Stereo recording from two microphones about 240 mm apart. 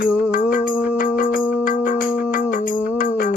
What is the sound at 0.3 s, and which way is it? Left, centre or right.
Music, left.